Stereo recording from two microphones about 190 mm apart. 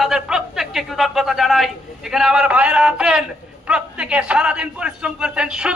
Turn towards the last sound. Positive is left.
turn(degrees=-5)  # may be behind; listen again after turning